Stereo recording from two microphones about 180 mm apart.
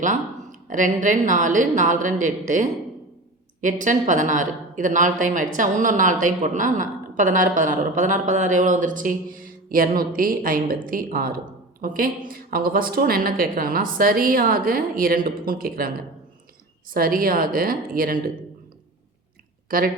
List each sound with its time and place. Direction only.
0.7 s a woman's voice: 45° right (ahead or behind)
16.9 s a woman's voice: 55° right (ahead or behind)
19.7 s a woman's voice: 50° right (ahead or behind)